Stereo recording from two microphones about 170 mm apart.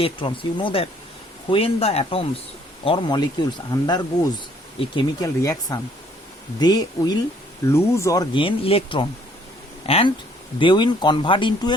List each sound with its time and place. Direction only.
0.0 s speech: 30° left (ahead or behind)
8.4 s speech: 35° left (ahead or behind)